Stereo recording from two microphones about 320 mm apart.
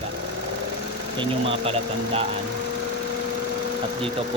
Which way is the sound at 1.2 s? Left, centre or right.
Centre.